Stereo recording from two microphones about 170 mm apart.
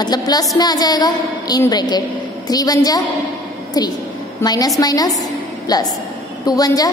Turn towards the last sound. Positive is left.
turn(degrees=20)  # may be behind; listen again after turning